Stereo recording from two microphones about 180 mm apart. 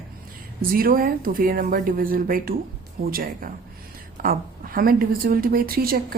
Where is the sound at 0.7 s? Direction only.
55° right (ahead or behind).